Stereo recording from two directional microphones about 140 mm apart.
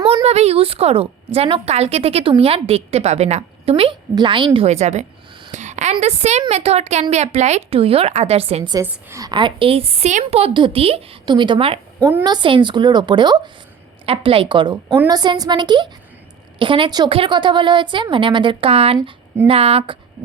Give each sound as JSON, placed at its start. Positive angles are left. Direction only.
{"t": 0.0, "sound": "a woman's voice", "side_deg": -45}
{"t": 5.5, "sound": "a sound", "side_deg": -60}
{"t": 6.5, "sound": "a woman's voice", "side_deg": -50}
{"t": 8.8, "sound": "a woman's voice", "side_deg": -15}
{"t": 9.3, "sound": "a woman's voice", "side_deg": -35}